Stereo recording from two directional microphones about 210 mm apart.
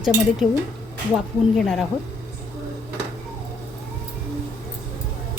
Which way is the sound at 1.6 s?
Centre (ahead or behind).